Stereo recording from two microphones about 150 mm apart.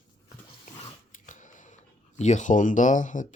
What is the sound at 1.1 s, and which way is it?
Camera, 55° left (ahead or behind).